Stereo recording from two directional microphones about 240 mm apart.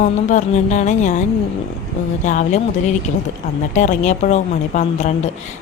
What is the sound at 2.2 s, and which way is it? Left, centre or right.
Speech, left.